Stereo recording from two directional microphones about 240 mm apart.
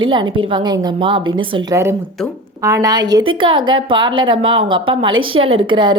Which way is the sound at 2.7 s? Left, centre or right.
Centre.